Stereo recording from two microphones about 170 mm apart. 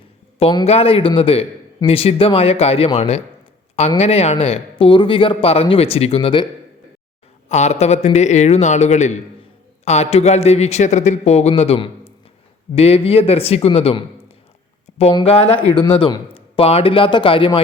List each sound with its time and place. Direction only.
0.6 s a man's voice: 35° left (ahead or behind)
7.4 s a man's voice: 45° left (ahead or behind)